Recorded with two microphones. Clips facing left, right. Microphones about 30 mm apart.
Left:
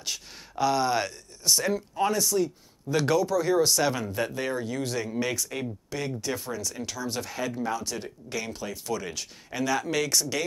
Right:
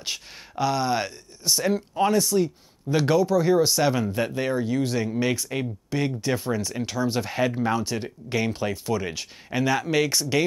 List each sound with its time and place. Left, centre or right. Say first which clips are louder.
0.6 s speech: right 1 dB; centre